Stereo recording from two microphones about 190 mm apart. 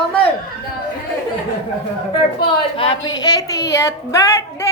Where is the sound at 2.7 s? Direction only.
30° left (ahead or behind).